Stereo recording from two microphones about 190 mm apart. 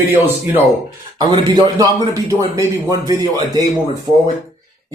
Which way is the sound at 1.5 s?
20° right (ahead or behind).